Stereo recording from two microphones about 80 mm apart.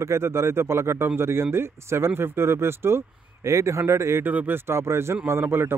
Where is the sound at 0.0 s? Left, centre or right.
Right.